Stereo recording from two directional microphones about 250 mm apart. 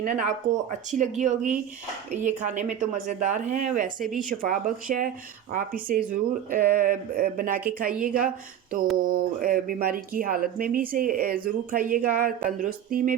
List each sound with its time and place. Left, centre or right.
0.0 s a woman's voice: right